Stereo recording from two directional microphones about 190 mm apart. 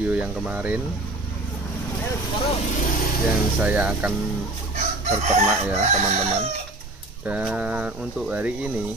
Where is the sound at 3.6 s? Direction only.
5° right (ahead or behind).